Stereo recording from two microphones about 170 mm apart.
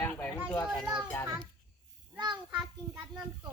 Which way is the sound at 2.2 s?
25° right (ahead or behind).